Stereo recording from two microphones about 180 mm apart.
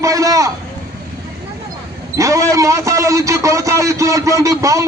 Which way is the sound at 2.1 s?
15° right (ahead or behind).